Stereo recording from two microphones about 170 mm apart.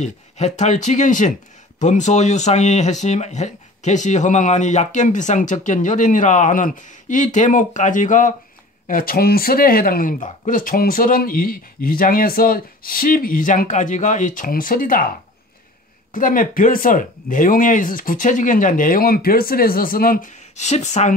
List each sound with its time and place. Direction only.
0.0 s speech: 40° left (ahead or behind)